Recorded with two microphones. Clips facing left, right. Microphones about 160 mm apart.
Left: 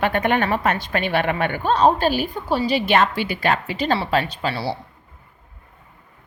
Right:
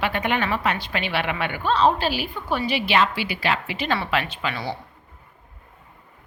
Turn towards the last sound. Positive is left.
turn(degrees=35)  # may be behind; listen again after turning